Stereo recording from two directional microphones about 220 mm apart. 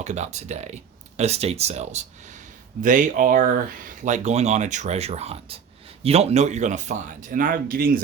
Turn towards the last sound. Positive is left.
turn(degrees=-40)  # may be behind; listen again after turning